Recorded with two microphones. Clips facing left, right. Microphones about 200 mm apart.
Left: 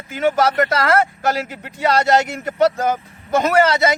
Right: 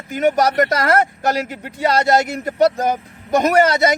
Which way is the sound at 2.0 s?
40° right (ahead or behind).